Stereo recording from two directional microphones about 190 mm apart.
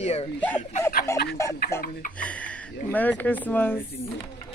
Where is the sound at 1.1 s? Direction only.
15° left (ahead or behind).